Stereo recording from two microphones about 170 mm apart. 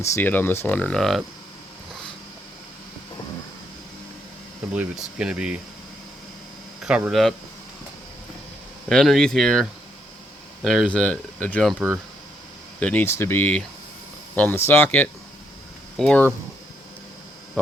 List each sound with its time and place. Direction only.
0.0 s speech: 15° left (ahead or behind)
5.1 s speech: 5° right (ahead or behind)
6.8 s speech: 5° right (ahead or behind)
8.9 s speech: 5° left (ahead or behind)
12.8 s speech: 10° left (ahead or behind)